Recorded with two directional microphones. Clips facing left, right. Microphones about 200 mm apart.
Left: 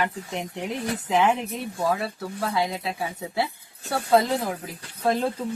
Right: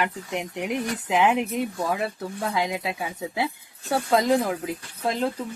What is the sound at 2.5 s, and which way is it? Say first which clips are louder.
Speech: even; 15° right (ahead or behind).